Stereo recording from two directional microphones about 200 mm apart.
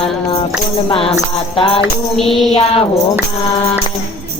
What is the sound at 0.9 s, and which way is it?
Music, 30° left (ahead or behind).